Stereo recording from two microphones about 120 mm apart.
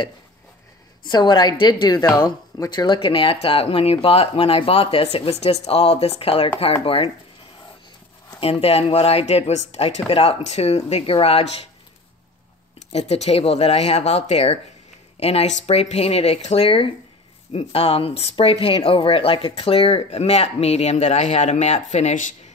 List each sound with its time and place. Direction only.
1.0 s speech: 40° left (ahead or behind)
8.4 s speech: 55° left (ahead or behind)
12.9 s speech: 60° left (ahead or behind)